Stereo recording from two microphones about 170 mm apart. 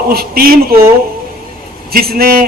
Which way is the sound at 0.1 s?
60° right (ahead or behind).